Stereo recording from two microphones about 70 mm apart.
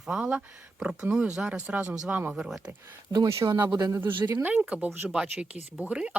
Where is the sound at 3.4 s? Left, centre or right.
Right.